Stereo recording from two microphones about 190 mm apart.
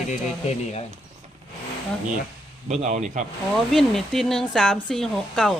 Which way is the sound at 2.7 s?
35° right (ahead or behind).